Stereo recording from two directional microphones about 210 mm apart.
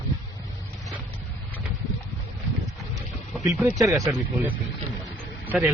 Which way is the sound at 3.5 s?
10° right (ahead or behind).